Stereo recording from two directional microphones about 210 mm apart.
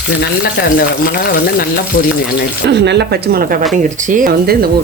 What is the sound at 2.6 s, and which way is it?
Speech, 55° right (ahead or behind).